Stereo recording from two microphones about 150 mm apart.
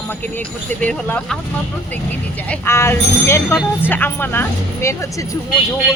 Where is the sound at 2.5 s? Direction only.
15° left (ahead or behind).